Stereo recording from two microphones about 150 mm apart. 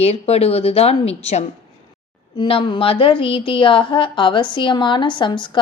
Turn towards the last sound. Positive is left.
turn(degrees=30)  # may be behind; listen again after turning